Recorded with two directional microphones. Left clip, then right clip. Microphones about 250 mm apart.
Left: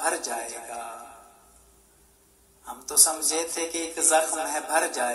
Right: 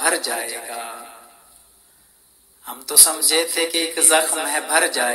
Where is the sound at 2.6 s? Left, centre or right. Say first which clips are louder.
Right 6 dB; right.